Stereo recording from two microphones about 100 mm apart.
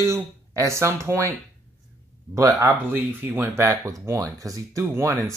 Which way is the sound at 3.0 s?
20° right (ahead or behind).